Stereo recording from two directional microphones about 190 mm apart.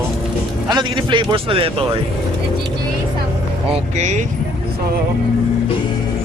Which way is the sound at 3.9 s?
40° right (ahead or behind).